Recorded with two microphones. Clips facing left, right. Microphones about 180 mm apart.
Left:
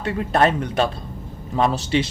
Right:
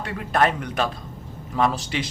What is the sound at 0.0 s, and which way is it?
Speech, 30° left (ahead or behind).